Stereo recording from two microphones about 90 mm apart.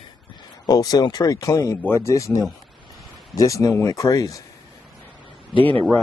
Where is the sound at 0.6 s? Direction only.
45° left (ahead or behind).